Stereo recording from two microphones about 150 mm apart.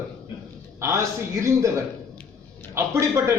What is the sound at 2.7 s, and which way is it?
Speech, 20° right (ahead or behind).